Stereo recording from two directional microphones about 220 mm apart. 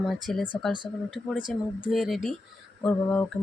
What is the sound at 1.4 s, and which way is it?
Speech, 20° right (ahead or behind).